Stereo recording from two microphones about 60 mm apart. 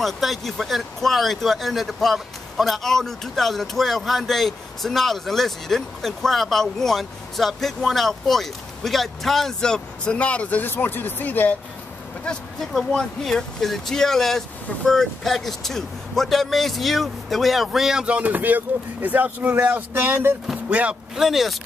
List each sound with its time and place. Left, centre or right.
0.0 s speech: centre
10.1 s speech: left
12.7 s speech: centre
18.0 s speech: right
19.9 s speech: right
21.2 s speech: centre